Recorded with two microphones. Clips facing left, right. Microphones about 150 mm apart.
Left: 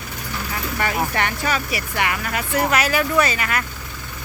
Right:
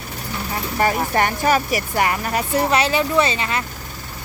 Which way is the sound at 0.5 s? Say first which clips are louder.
Right 5 dB; 35° right (ahead or behind).